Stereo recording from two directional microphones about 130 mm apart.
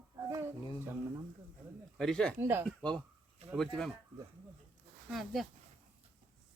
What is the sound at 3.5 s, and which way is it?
Speech, 5° left (ahead or behind).